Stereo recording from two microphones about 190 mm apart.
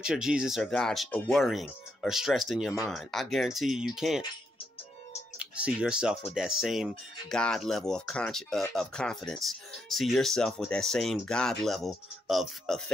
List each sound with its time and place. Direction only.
0.0 s speech: 5° right (ahead or behind)
5.4 s speech: 5° right (ahead or behind)